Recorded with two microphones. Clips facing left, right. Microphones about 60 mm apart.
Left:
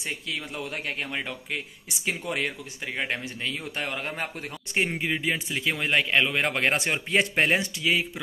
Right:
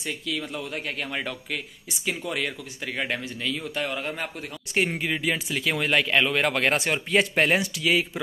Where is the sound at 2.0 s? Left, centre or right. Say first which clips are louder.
Even; left.